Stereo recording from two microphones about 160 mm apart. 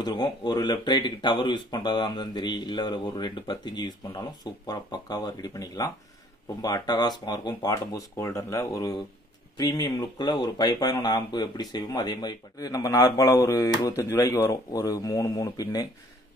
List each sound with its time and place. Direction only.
0.0 s speech: 25° left (ahead or behind)